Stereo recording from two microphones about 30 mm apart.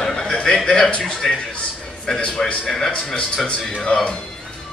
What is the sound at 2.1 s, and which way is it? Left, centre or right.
Speech, left.